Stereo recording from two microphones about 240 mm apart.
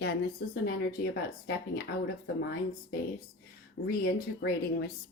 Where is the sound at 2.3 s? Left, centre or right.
Left.